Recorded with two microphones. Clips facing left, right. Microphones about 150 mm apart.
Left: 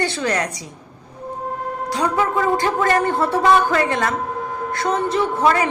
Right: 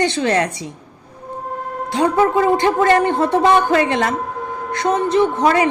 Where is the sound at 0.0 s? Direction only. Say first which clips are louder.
Right 4 dB; 25° right (ahead or behind).